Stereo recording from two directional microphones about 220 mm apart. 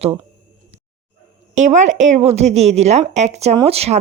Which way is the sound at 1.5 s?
35° right (ahead or behind).